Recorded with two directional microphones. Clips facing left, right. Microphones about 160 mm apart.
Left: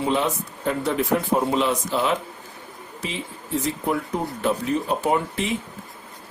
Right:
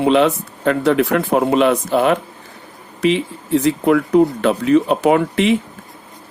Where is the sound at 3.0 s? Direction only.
75° right (ahead or behind).